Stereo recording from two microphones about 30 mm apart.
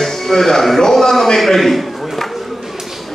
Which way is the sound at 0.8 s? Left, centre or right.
Centre.